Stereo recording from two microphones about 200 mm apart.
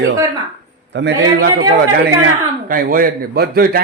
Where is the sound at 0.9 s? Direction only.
55° right (ahead or behind).